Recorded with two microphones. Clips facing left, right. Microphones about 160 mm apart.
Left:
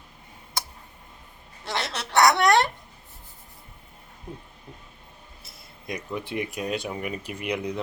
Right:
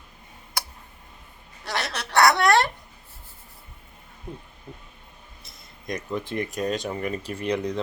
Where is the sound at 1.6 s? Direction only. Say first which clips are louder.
Even; 20° left (ahead or behind).